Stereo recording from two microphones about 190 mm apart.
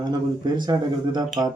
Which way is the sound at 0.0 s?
20° right (ahead or behind).